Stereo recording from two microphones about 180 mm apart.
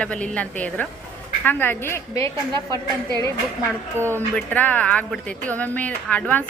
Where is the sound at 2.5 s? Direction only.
20° right (ahead or behind).